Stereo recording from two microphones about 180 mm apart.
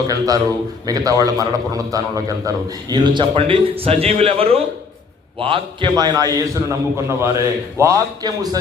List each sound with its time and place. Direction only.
0.1 s a man's voice: 20° right (ahead or behind)